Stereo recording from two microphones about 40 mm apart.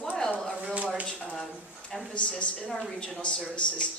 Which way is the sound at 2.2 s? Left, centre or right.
Left.